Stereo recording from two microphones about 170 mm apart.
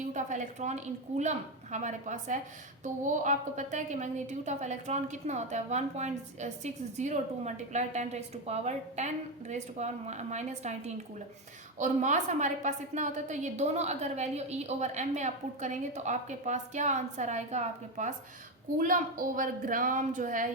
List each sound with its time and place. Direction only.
0.1 s a woman's voice: 45° right (ahead or behind)